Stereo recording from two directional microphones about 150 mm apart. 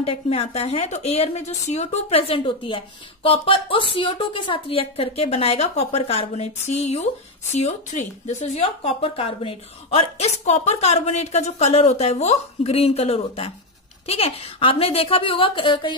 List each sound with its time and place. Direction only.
0.0 s speech: 40° left (ahead or behind)